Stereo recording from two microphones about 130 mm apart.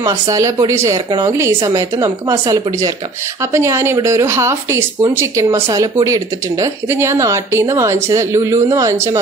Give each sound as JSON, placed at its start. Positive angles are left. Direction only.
{"t": 0.0, "sound": "speech", "side_deg": -25}